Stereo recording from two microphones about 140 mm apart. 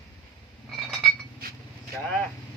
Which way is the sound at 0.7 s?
Centre (ahead or behind).